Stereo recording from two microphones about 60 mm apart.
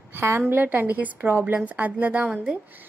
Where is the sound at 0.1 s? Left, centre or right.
Right.